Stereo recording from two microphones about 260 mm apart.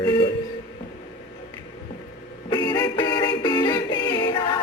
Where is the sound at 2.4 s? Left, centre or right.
Centre.